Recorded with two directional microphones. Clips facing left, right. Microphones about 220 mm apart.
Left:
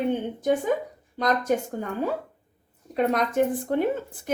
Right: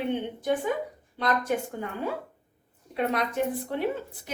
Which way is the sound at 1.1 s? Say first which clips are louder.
Left 3 dB; 40° left (ahead or behind).